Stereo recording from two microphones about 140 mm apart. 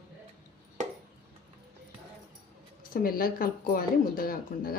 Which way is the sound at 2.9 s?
90° left.